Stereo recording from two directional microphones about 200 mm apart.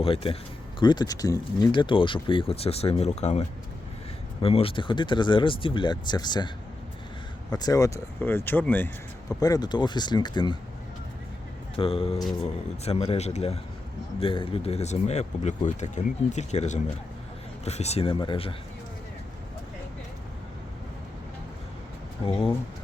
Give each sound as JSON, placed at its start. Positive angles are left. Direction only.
{"t": 0.0, "sound": "speech", "side_deg": 30}
{"t": 7.5, "sound": "speech", "side_deg": 15}
{"t": 11.8, "sound": "speech", "side_deg": 30}